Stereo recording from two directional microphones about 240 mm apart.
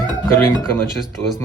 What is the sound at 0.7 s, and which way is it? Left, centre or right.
Speech, centre.